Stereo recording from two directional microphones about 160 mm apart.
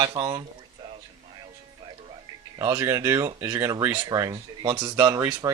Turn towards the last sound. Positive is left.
turn(degrees=-15)  # may be behind; listen again after turning